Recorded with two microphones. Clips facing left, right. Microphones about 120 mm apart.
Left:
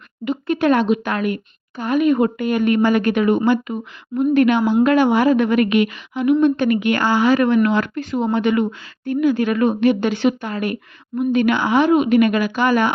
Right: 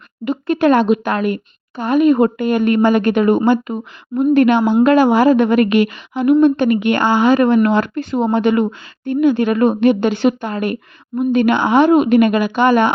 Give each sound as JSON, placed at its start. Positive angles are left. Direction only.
{"t": 0.3, "sound": "speech", "side_deg": -40}
{"t": 3.2, "sound": "speech", "side_deg": -40}
{"t": 11.9, "sound": "speech", "side_deg": -40}
{"t": 12.3, "sound": "speech", "side_deg": -20}